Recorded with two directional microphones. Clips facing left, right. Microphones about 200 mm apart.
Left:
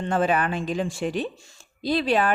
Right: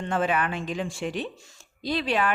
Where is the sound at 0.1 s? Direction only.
35° left (ahead or behind).